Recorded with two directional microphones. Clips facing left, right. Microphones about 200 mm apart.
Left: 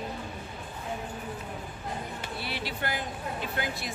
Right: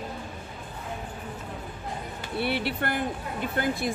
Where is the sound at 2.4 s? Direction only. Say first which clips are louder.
Right 8 dB; 60° right (ahead or behind).